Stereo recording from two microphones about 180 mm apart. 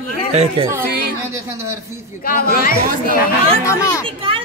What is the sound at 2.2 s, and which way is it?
Speech, 55° left (ahead or behind).